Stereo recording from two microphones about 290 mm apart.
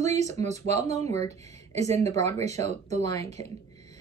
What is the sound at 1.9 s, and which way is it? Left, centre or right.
Speech, right.